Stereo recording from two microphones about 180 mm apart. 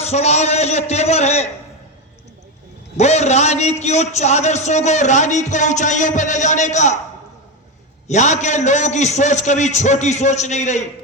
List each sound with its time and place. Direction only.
0.0 s a man's voice: 35° left (ahead or behind)
3.0 s a man's voice: 40° left (ahead or behind)
8.0 s a man's voice: 40° left (ahead or behind)